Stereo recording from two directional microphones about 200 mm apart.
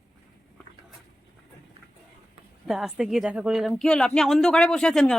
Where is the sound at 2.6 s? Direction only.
Centre (ahead or behind).